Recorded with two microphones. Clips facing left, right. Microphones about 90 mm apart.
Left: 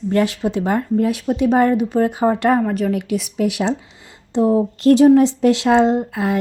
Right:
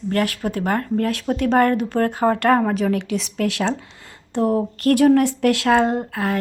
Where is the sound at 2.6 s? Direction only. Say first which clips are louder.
Left 1 dB; centre (ahead or behind).